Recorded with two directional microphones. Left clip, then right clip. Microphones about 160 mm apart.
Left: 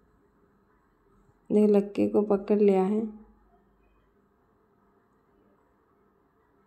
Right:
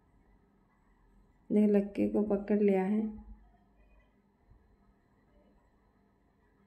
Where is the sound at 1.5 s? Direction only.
25° left (ahead or behind).